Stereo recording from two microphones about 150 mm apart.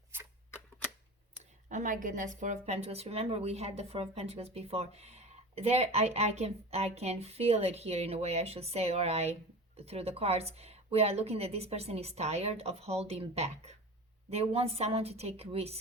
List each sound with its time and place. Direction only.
1.7 s speech: 60° right (ahead or behind); by 15.8 s 40° right (ahead or behind)